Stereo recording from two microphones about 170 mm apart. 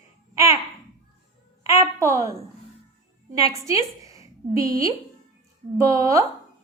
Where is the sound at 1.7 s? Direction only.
20° right (ahead or behind).